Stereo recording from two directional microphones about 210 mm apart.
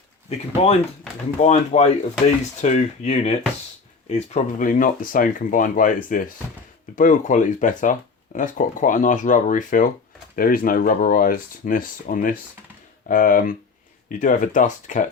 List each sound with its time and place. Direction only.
0.3 s speech: 30° left (ahead or behind)